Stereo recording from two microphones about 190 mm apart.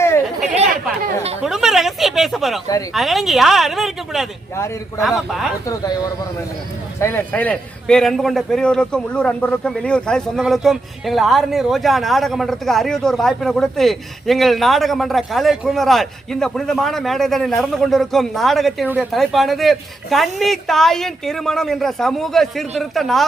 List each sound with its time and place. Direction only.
1.4 s a man's voice: centre (ahead or behind)
5.6 s speech: 20° left (ahead or behind)
7.0 s a man's voice: 10° left (ahead or behind)